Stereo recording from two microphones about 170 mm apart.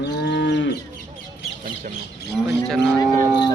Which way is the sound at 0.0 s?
90° left.